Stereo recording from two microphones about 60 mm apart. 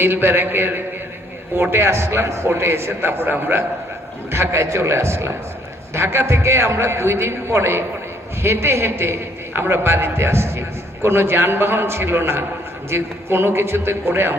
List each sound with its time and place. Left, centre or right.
0.0 s a man's voice: right
4.3 s a man's voice: right